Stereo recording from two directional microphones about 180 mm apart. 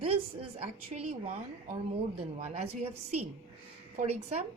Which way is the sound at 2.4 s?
35° right (ahead or behind).